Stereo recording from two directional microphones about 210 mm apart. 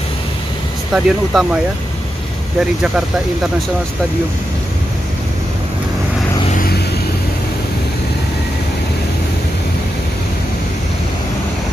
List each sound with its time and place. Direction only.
0.9 s speech: 5° right (ahead or behind)
6.5 s vehicle: 45° left (ahead or behind)